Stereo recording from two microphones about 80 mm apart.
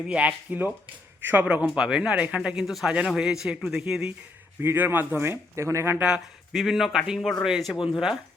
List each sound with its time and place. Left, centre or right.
0.1 s speech: centre
4.6 s speech: right
6.0 s speech: centre
6.5 s speech: centre